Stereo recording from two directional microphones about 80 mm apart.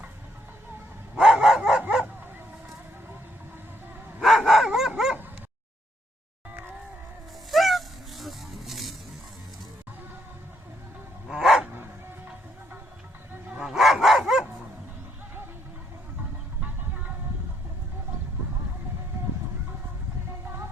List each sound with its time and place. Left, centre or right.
1.1 s dog: centre
4.2 s dog: centre
6.5 s music: right
7.5 s a sound: centre
11.3 s dog: centre
13.5 s dog: centre
16.6 s music: right